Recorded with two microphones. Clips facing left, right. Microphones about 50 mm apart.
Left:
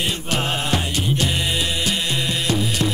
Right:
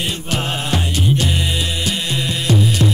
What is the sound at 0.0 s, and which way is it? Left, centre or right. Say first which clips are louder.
Music: right 1 dB; centre.